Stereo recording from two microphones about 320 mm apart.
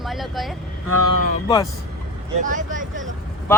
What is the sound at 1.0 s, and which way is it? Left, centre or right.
Speech, right.